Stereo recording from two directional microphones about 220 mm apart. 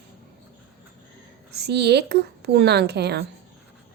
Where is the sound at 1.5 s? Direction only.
50° right (ahead or behind).